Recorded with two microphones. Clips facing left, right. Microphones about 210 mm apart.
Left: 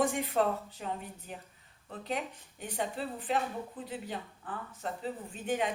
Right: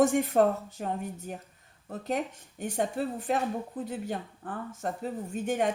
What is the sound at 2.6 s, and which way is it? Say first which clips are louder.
Speech: right 6 dB; 45° right (ahead or behind).